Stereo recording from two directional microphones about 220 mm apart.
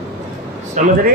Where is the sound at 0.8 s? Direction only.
35° right (ahead or behind).